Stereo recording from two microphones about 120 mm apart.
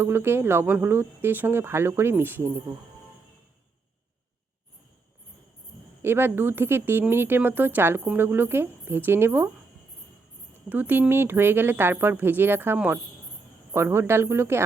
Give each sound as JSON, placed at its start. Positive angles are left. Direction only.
{"t": 0.0, "sound": "speech", "side_deg": -20}
{"t": 6.0, "sound": "speech", "side_deg": -20}
{"t": 10.7, "sound": "speech", "side_deg": -15}